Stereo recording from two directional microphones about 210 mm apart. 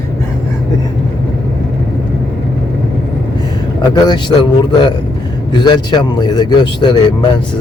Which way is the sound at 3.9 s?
20° left (ahead or behind).